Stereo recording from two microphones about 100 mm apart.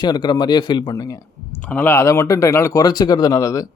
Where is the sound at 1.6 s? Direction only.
15° left (ahead or behind); by 3.7 s 35° left (ahead or behind).